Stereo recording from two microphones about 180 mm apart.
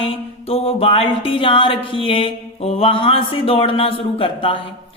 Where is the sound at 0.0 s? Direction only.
30° left (ahead or behind).